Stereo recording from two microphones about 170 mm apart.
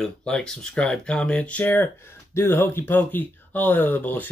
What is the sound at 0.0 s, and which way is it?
Speech, 5° left (ahead or behind).